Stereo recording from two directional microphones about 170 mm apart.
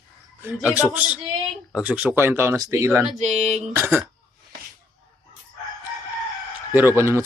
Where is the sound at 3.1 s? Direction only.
40° right (ahead or behind).